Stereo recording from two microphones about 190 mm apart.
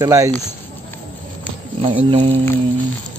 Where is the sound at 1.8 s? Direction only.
30° right (ahead or behind).